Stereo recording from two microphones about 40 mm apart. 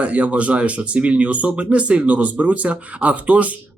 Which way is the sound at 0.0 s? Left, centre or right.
Right.